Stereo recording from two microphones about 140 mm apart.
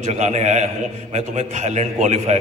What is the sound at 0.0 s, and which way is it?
A man's voice, 55° right (ahead or behind).